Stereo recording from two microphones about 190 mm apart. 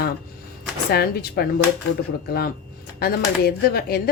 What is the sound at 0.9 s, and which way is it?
Speech, 55° left (ahead or behind).